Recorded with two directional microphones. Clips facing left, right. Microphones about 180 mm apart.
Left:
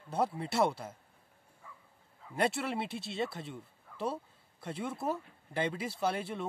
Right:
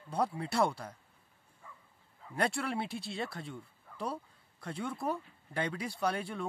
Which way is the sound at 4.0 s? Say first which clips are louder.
Left 2 dB; 25° left (ahead or behind).